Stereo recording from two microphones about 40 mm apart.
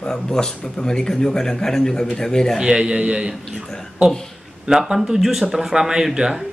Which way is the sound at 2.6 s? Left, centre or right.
Right.